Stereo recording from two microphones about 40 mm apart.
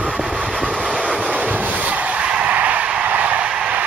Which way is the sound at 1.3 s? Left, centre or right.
Right.